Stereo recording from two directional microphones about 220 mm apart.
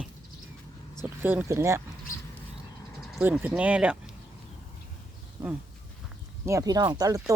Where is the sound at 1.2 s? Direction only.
10° right (ahead or behind).